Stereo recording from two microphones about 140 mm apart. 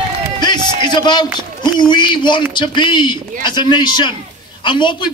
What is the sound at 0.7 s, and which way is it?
A man's voice, 30° left (ahead or behind).